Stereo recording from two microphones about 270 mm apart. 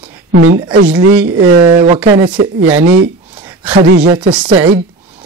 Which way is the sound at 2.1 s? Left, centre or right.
Centre.